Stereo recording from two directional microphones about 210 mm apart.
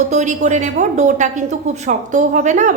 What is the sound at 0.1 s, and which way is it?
A woman's voice, 35° right (ahead or behind).